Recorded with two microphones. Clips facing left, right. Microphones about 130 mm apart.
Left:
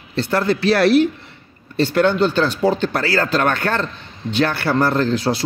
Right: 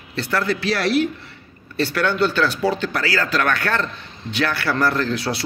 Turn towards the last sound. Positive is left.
turn(degrees=30)  # may be behind; listen again after turning